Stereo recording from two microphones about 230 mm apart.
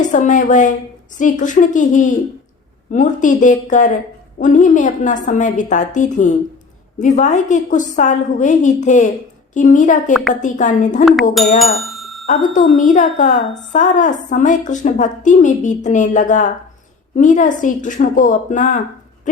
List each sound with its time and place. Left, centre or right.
0.0 s a woman's voice: left
10.1 s speech: centre
10.4 s a woman's voice: left
11.0 s speech: centre
11.6 s bicycle bell: centre
12.2 s a woman's voice: left